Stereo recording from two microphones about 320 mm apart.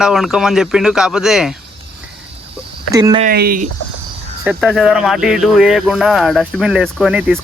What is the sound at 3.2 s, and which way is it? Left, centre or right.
Speech, right.